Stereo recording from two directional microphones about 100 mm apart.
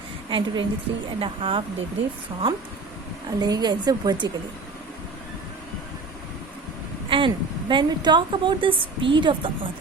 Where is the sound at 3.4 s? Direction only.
45° right (ahead or behind).